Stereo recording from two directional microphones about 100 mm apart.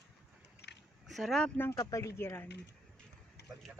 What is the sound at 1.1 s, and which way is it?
Speech, centre (ahead or behind).